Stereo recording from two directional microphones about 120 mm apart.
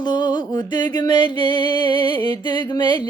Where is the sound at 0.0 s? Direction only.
40° left (ahead or behind).